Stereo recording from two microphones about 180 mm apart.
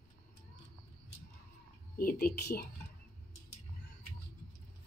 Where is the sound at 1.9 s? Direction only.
60° left (ahead or behind).